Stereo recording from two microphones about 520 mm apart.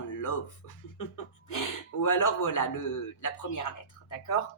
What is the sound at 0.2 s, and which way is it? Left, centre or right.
Speech, left.